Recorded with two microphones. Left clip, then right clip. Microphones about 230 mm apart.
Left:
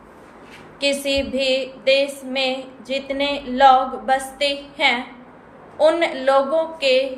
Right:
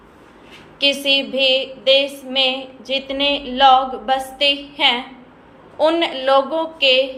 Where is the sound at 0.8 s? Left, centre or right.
Centre.